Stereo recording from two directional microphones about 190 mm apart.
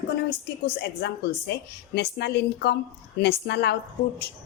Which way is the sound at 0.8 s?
60° left (ahead or behind).